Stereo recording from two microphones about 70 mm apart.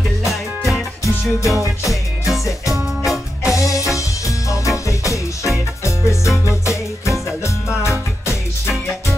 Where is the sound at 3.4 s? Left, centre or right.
Left.